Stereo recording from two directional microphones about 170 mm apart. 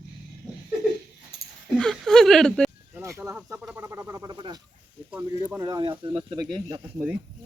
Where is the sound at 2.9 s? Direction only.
15° right (ahead or behind).